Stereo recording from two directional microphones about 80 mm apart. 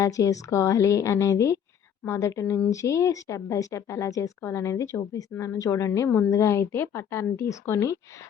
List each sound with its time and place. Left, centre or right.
0.0 s a woman's voice: left
6.1 s a woman's voice: left
6.3 s speech: left